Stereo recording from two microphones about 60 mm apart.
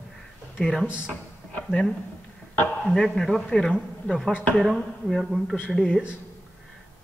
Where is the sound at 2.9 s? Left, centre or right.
Centre.